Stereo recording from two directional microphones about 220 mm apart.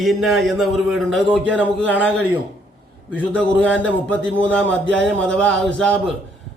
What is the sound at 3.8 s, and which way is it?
Speech, 5° left (ahead or behind).